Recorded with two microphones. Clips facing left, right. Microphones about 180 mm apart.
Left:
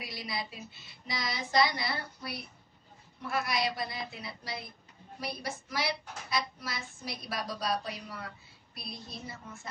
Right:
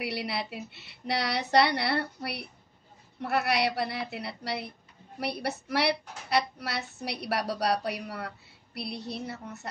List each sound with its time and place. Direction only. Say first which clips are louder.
0.0 s speech: right 6 dB; 70° right (ahead or behind)